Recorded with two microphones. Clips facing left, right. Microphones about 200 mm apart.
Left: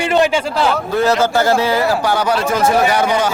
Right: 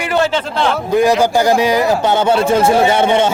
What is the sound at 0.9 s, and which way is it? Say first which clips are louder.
A man's voice: right 3 dB; 15° right (ahead or behind).